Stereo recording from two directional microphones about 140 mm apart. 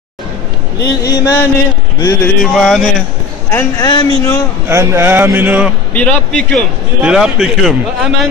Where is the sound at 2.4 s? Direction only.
5° left (ahead or behind).